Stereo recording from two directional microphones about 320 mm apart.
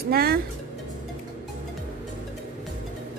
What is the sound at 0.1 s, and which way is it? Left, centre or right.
Speech, right.